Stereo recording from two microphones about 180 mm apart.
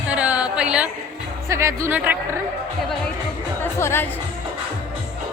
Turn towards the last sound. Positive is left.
turn(degrees=15)  # may be behind; listen again after turning